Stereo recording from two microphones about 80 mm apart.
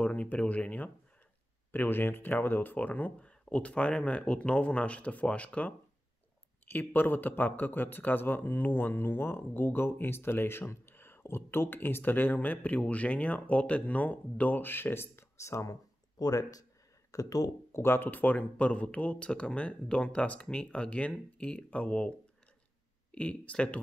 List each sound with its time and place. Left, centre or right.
0.0 s speech: centre; by 17.8 s left
17.8 s speech: left
23.1 s speech: centre